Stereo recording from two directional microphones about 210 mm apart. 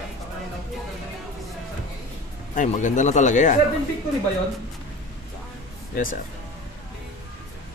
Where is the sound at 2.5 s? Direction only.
35° left (ahead or behind).